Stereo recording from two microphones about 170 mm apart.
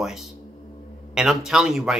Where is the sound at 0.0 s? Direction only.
5° right (ahead or behind).